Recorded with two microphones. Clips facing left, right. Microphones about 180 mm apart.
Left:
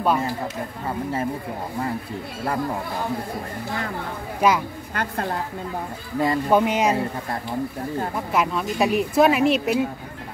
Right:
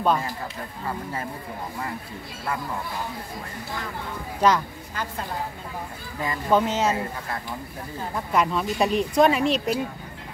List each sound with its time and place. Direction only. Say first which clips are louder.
4.4 s speech: left 1 dB; 10° left (ahead or behind)
4.9 s a woman's voice: left 5 dB; 65° left (ahead or behind)
6.1 s speech: left 9 dB; 35° left (ahead or behind)
6.5 s speech: even; 15° left (ahead or behind)
8.3 s speech: right 2 dB; 5° left (ahead or behind)